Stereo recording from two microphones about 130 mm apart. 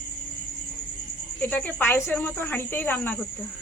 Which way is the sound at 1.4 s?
10° left (ahead or behind).